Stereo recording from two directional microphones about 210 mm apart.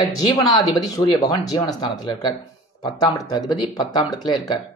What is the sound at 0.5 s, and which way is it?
Speech, 20° left (ahead or behind).